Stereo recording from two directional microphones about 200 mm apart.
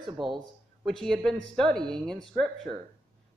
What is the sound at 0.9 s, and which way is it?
Speech, centre (ahead or behind).